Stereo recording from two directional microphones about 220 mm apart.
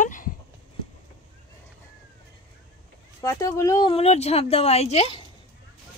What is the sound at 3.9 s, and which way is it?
Speech, 30° left (ahead or behind).